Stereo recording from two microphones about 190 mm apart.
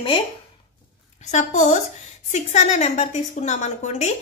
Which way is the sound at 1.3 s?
40° left (ahead or behind).